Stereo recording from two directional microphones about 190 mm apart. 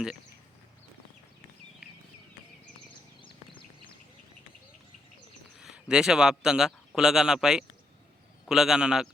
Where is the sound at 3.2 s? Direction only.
25° left (ahead or behind).